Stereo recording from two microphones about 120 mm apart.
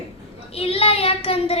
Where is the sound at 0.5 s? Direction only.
55° left (ahead or behind).